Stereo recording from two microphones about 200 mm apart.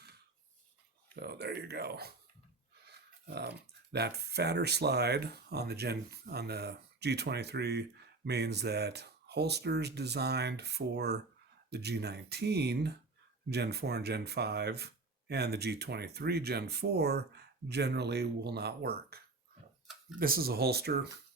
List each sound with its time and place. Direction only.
1.1 s speech: 55° right (ahead or behind)
2.8 s a sound: 55° right (ahead or behind)
3.9 s speech: 55° right (ahead or behind)